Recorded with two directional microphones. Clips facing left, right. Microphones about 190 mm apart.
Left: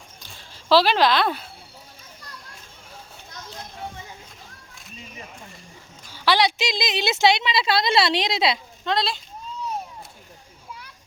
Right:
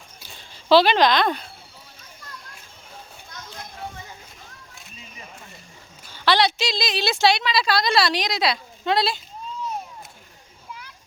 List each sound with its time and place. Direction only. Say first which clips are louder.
0.2 s a sound: even; centre (ahead or behind)
6.1 s a woman's voice: right 1 dB; 10° left (ahead or behind)
8.8 s speech: right 4 dB; 5° right (ahead or behind)